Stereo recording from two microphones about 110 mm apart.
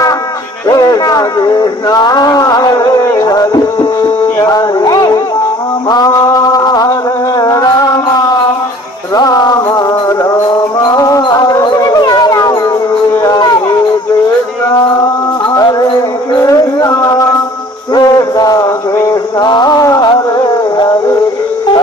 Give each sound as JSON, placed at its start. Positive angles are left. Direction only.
{"t": 0.7, "sound": "speech", "side_deg": 35}
{"t": 3.1, "sound": "music", "side_deg": 30}
{"t": 5.9, "sound": "a sound", "side_deg": 30}
{"t": 7.3, "sound": "music", "side_deg": 35}
{"t": 9.1, "sound": "music", "side_deg": 35}
{"t": 13.2, "sound": "a sound", "side_deg": 40}
{"t": 15.5, "sound": "music", "side_deg": 35}
{"t": 16.3, "sound": "a sound", "side_deg": 30}
{"t": 19.5, "sound": "music", "side_deg": 40}